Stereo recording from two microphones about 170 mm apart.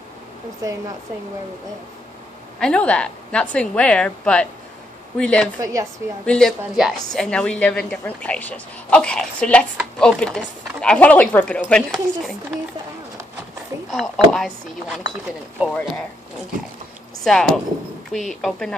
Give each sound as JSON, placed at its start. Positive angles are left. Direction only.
{"t": 2.6, "sound": "a woman's voice", "side_deg": 5}
{"t": 5.6, "sound": "a woman's voice", "side_deg": -20}
{"t": 6.2, "sound": "a woman's voice", "side_deg": 5}
{"t": 13.9, "sound": "a woman's voice", "side_deg": 0}
{"t": 15.6, "sound": "a woman's voice", "side_deg": 0}
{"t": 17.2, "sound": "a woman's voice", "side_deg": 5}